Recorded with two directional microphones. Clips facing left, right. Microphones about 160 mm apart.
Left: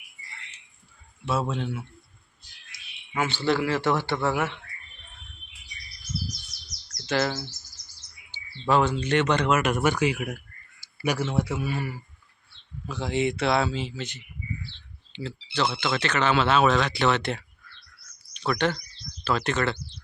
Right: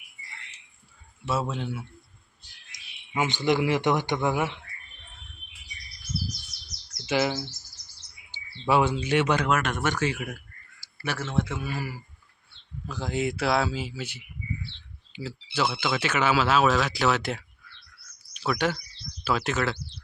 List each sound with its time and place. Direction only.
1.2 s speech: 5° right (ahead or behind)
2.7 s speech: 15° right (ahead or behind)
6.9 s bird: 10° right (ahead or behind)
8.3 s speech: 10° right (ahead or behind)